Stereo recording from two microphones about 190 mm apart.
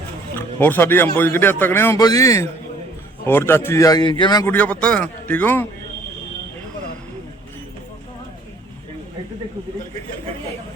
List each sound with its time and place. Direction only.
0.3 s speech: 10° left (ahead or behind)
4.5 s speech: 5° left (ahead or behind)